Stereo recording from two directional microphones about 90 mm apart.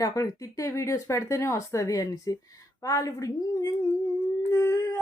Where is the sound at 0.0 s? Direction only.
40° left (ahead or behind).